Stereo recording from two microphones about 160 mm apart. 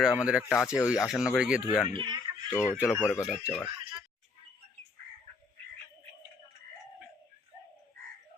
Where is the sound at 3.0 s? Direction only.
15° left (ahead or behind).